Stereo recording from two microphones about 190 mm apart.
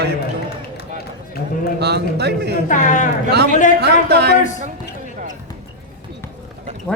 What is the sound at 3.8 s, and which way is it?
Speech, 60° right (ahead or behind).